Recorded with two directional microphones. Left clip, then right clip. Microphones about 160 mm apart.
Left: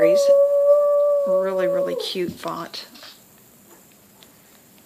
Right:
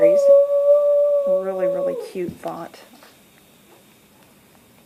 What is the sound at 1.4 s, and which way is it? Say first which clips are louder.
Howl: left 1 dB; 45° left (ahead or behind).